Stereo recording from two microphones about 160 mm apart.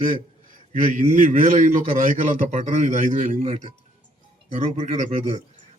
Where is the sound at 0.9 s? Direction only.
55° right (ahead or behind).